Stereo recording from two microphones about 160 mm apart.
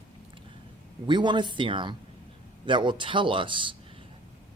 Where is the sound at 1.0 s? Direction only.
30° right (ahead or behind).